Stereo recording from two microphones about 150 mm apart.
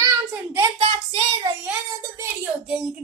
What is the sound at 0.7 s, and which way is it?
Child singing, 40° right (ahead or behind).